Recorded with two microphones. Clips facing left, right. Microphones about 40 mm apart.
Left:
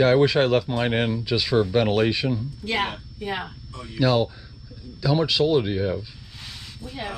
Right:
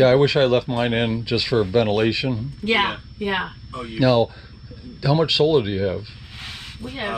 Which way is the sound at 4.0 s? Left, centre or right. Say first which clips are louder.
Right 4 dB; centre.